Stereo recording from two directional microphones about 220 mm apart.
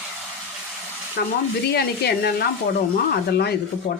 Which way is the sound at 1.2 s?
45° left (ahead or behind).